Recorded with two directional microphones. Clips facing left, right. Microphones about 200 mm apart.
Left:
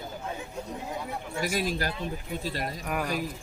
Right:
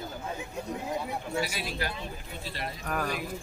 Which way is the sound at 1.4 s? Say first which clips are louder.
Left 7 dB; 45° left (ahead or behind).